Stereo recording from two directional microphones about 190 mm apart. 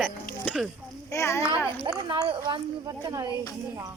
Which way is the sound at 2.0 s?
25° right (ahead or behind).